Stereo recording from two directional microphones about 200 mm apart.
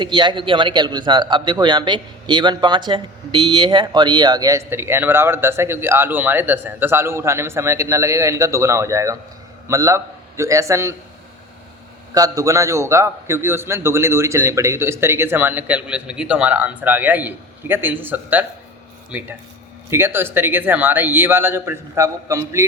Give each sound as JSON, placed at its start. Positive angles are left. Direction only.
{"t": 0.0, "sound": "a man's voice", "side_deg": -25}
{"t": 12.1, "sound": "a man's voice", "side_deg": -15}